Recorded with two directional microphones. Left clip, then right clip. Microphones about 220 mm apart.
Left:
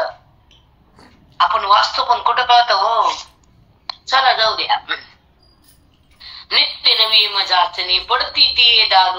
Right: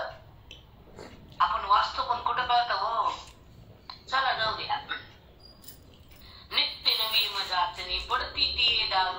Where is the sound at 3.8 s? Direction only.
45° left (ahead or behind).